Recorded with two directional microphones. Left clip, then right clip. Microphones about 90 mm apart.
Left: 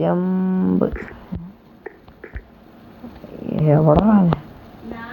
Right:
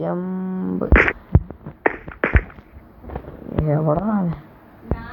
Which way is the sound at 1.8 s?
50° right (ahead or behind).